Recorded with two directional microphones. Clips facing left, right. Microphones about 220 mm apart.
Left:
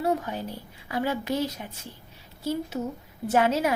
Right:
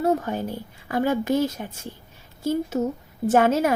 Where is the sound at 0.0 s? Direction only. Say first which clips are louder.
Right 4 dB; 45° right (ahead or behind).